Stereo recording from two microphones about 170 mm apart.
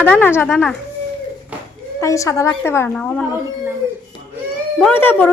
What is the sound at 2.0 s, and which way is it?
A woman's voice, 20° left (ahead or behind).